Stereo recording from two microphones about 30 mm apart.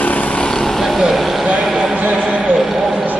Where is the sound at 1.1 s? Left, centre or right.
Centre.